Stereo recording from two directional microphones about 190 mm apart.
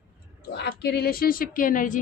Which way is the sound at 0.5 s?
60° left (ahead or behind).